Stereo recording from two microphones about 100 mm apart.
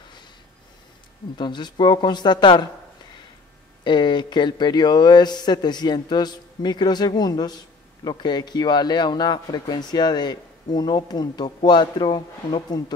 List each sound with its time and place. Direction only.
1.4 s speech: 50° left (ahead or behind)
3.8 s speech: 50° left (ahead or behind)